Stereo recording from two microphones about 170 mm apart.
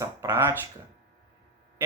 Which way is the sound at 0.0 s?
15° right (ahead or behind).